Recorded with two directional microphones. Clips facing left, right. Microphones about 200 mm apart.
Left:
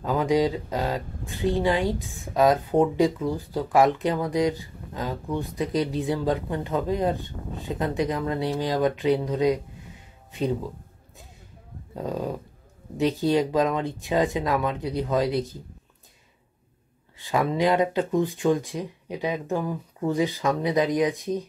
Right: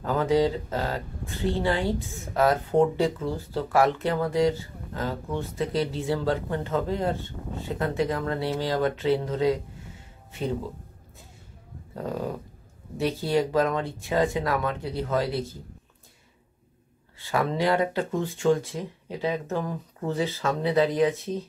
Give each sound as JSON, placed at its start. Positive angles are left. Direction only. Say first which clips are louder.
{"t": 0.0, "sound": "speech", "louder": "even", "side_deg": 15}
{"t": 12.9, "sound": "speech", "louder": "left 3 dB", "side_deg": 20}
{"t": 17.2, "sound": "speech", "louder": "left 2 dB", "side_deg": 15}